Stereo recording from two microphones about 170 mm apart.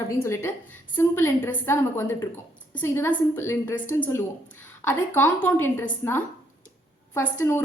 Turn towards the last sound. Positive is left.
turn(degrees=15)  # may be behind; listen again after turning